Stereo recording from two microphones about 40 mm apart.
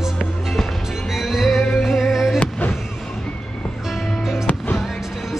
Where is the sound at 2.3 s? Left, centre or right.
Left.